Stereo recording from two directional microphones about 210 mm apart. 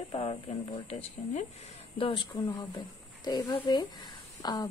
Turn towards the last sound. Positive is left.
turn(degrees=20)  # may be behind; listen again after turning